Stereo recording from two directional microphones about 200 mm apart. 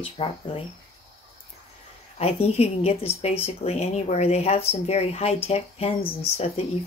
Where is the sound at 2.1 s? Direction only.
30° left (ahead or behind).